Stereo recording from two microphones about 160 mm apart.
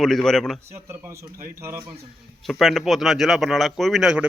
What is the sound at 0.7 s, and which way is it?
Speech, 15° right (ahead or behind).